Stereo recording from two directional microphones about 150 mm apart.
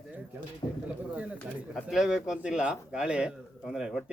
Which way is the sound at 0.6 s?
35° left (ahead or behind).